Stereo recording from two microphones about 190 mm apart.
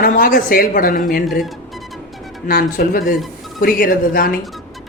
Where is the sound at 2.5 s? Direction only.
50° left (ahead or behind).